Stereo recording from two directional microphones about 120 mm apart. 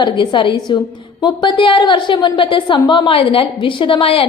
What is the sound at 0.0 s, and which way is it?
A woman's voice, 40° left (ahead or behind).